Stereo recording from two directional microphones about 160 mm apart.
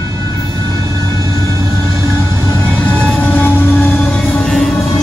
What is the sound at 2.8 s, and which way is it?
Music, 10° left (ahead or behind).